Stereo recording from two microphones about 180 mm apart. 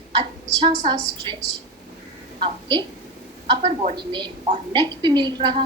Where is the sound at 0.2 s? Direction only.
30° right (ahead or behind).